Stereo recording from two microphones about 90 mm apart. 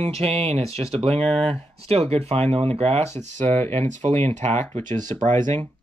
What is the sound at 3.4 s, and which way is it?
Speech, 20° left (ahead or behind).